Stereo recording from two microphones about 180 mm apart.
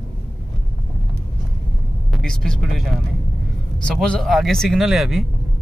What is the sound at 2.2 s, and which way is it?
Speech, 5° left (ahead or behind).